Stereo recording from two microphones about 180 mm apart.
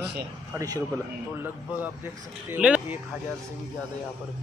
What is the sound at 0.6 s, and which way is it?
Speech, 20° right (ahead or behind).